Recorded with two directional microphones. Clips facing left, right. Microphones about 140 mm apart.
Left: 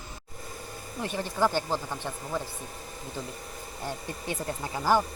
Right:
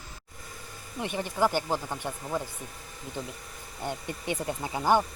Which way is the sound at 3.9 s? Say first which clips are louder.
Right 2 dB; 20° right (ahead or behind).